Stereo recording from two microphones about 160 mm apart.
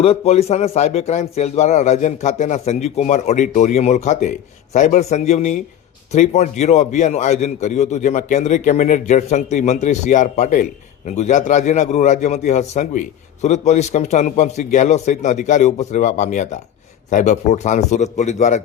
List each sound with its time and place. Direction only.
0.0 s a man's voice: 40° left (ahead or behind)